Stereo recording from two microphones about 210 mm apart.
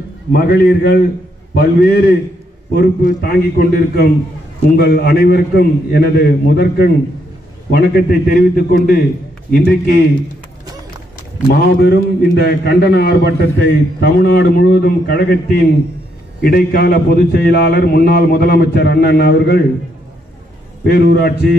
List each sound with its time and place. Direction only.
0.3 s a man's voice: 50° left (ahead or behind)
11.8 s a man's voice: 50° left (ahead or behind)
20.8 s a man's voice: 50° left (ahead or behind)